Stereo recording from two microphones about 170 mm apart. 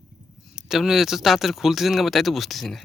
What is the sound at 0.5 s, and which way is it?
Speech, centre (ahead or behind).